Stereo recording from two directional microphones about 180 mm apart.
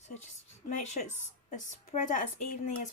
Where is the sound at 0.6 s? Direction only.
40° left (ahead or behind).